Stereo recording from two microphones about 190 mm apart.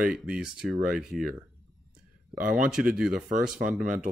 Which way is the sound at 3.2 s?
40° right (ahead or behind).